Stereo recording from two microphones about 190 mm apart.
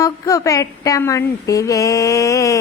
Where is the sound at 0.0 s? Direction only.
15° left (ahead or behind).